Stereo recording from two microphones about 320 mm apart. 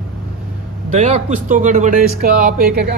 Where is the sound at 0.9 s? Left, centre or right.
Right.